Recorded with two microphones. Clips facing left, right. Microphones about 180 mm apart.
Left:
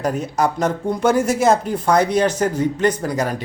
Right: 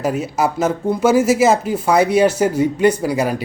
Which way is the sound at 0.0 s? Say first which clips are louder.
Right 1 dB; 5° right (ahead or behind).